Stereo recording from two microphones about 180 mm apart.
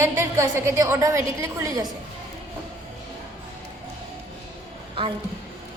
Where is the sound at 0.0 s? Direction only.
15° right (ahead or behind).